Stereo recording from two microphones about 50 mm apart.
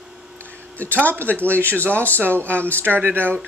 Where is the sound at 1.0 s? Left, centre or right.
Right.